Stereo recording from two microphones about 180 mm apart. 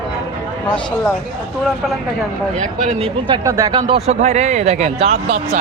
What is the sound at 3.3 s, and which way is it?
Speech, 20° right (ahead or behind).